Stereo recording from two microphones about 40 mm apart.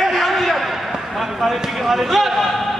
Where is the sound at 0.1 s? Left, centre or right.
Centre.